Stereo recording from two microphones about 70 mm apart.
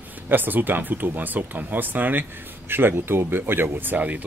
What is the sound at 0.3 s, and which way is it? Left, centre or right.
Speech, right.